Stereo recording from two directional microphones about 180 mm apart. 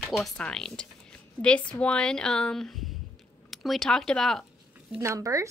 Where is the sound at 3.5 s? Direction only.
Centre (ahead or behind).